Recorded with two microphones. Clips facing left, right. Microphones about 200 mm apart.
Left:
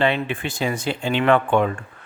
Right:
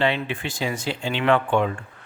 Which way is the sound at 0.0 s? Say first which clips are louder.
Left 2 dB; 55° left (ahead or behind).